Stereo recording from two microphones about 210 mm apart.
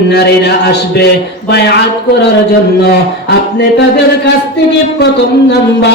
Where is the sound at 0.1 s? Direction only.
55° left (ahead or behind).